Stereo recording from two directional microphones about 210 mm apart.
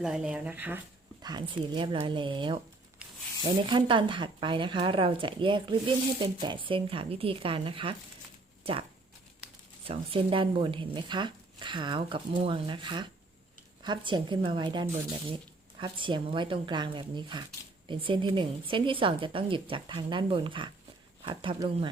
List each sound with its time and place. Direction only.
0.0 s speech: 5° right (ahead or behind)
1.2 s speech: 20° right (ahead or behind)
9.8 s speech: 25° right (ahead or behind)